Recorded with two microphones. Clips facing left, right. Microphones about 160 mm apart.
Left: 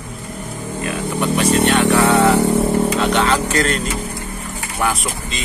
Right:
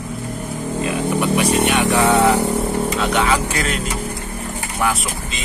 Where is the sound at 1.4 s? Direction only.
15° right (ahead or behind).